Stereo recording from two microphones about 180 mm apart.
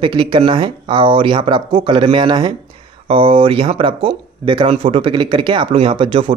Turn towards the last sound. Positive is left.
turn(degrees=-25)  # may be behind; listen again after turning